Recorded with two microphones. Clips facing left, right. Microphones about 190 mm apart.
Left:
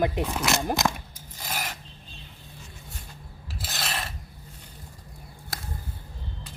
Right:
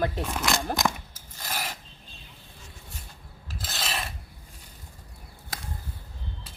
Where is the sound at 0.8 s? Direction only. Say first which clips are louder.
Left 1 dB; 15° left (ahead or behind).